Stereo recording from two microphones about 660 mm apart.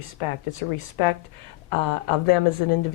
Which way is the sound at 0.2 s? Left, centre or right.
Left.